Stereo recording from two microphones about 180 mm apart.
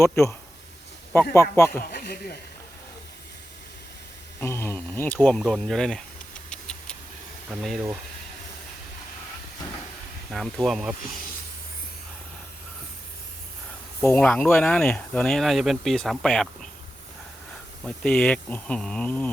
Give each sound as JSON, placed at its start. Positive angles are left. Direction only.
{"t": 0.0, "sound": "speech", "side_deg": 15}
{"t": 1.8, "sound": "speech", "side_deg": 60}
{"t": 4.4, "sound": "insect", "side_deg": 15}
{"t": 7.5, "sound": "speech", "side_deg": 0}
{"t": 10.3, "sound": "speech", "side_deg": 0}
{"t": 14.0, "sound": "speech", "side_deg": 10}
{"t": 17.8, "sound": "speech", "side_deg": 5}